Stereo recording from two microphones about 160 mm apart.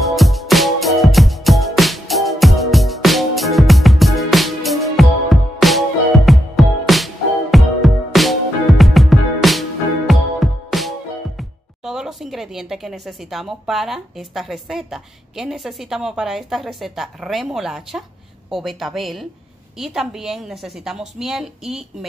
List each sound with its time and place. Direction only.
0.0 s music: centre (ahead or behind)
11.3 s a woman's voice: 5° right (ahead or behind)